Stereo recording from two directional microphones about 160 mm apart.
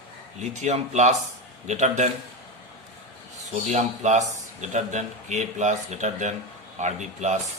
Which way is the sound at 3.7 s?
45° right (ahead or behind).